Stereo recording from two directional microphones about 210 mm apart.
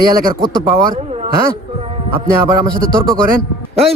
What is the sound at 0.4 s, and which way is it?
A man's voice, 20° right (ahead or behind).